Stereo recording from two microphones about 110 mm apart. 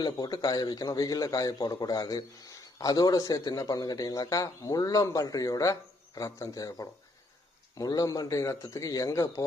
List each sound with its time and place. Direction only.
0.0 s a man's voice: 40° left (ahead or behind)